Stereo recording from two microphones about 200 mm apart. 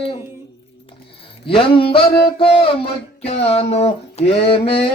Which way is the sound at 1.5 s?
25° left (ahead or behind).